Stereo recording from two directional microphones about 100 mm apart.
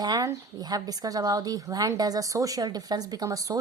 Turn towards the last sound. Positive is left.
turn(degrees=-35)  # may be behind; listen again after turning